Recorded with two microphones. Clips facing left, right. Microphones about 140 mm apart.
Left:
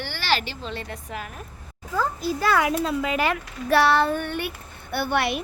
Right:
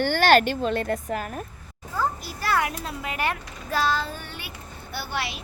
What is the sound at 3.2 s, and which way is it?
A woman's voice, 80° left.